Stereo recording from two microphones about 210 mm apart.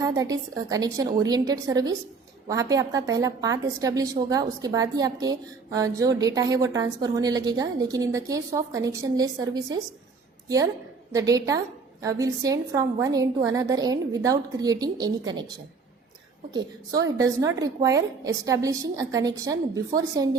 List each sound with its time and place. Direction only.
0.0 s a woman's voice: 15° right (ahead or behind)
11.1 s a woman's voice: 15° right (ahead or behind)